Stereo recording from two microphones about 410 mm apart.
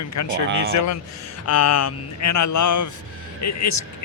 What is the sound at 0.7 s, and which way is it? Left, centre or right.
A man's voice, left.